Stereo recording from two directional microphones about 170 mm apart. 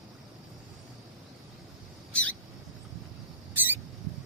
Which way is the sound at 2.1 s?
5° left (ahead or behind).